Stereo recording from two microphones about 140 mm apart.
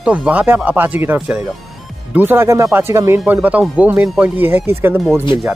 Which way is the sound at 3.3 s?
5° right (ahead or behind).